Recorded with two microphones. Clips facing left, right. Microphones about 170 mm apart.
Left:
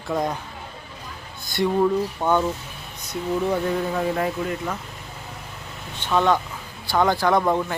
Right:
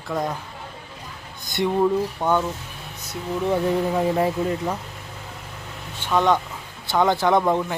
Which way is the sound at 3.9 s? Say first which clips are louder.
Right 3 dB; 20° right (ahead or behind).